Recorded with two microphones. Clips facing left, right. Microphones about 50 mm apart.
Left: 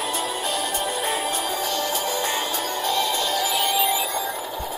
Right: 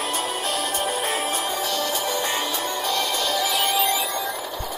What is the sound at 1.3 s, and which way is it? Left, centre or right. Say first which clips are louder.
Music: even; right.